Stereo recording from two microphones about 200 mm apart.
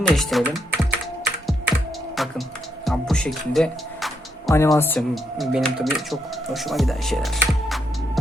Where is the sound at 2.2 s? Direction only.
Centre (ahead or behind).